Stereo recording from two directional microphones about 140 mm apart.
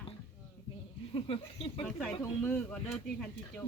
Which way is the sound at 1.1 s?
40° left (ahead or behind).